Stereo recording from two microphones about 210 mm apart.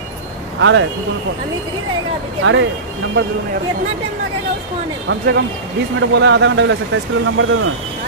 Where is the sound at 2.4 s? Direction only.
60° right (ahead or behind).